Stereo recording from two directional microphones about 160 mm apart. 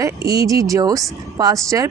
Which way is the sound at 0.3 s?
20° right (ahead or behind).